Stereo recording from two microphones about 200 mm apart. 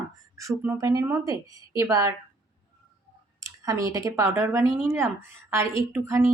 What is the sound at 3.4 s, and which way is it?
Speech, 15° right (ahead or behind).